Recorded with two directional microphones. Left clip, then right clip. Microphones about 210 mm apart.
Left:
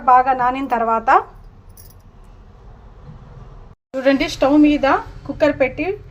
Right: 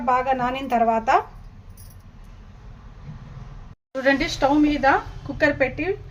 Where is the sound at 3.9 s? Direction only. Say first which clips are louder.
Left 4 dB; 20° left (ahead or behind).